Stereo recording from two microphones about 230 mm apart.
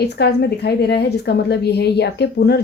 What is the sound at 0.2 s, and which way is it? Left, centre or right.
Speech, left.